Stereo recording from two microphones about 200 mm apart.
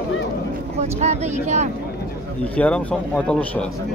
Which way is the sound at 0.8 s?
35° right (ahead or behind).